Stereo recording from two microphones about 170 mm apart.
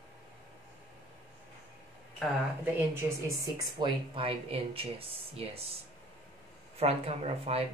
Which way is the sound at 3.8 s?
30° right (ahead or behind).